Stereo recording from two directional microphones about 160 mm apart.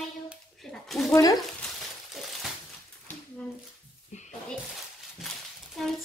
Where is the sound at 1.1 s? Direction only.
20° left (ahead or behind).